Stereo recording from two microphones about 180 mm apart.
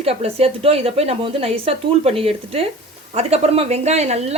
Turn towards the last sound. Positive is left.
turn(degrees=-35)  # may be behind; listen again after turning